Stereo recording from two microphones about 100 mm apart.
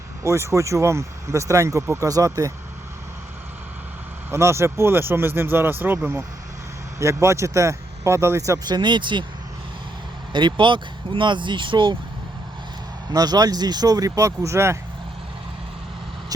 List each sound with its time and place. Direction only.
0.2 s speech: 30° right (ahead or behind)
4.3 s speech: 25° right (ahead or behind)
7.0 s speech: 30° right (ahead or behind); by 9.2 s 50° right (ahead or behind)
10.3 s speech: 55° right (ahead or behind)
13.1 s speech: 40° right (ahead or behind)